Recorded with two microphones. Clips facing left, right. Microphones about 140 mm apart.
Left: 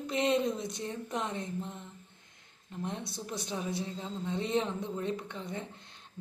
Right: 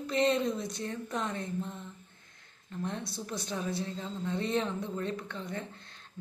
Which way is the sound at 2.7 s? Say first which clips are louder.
Right 1 dB; 15° left (ahead or behind).